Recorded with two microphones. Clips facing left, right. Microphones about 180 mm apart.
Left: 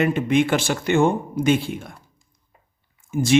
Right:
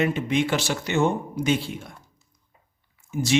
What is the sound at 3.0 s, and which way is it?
Speech, 50° left (ahead or behind).